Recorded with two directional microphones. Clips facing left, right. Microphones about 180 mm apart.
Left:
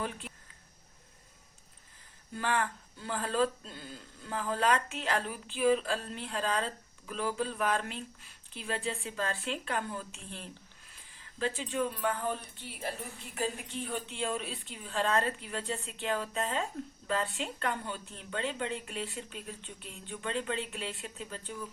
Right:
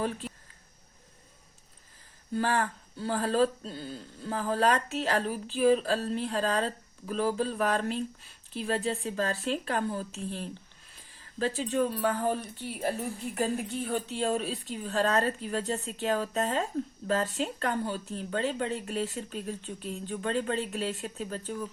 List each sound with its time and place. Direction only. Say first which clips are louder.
0.0 s speech: right 6 dB; 35° right (ahead or behind)
2.3 s speech: right 4 dB; 35° right (ahead or behind)